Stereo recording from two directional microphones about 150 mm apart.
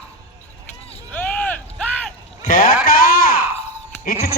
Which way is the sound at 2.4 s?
65° left (ahead or behind).